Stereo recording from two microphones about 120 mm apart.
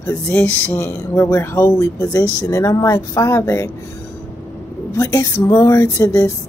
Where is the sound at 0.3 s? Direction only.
20° left (ahead or behind).